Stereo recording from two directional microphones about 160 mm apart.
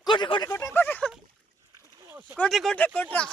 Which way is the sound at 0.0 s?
30° left (ahead or behind).